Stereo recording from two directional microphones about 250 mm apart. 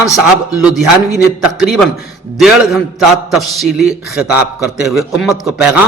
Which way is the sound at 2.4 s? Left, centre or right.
Centre.